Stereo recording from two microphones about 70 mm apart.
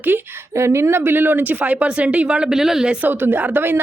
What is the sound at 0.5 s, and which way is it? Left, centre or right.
Speech, right.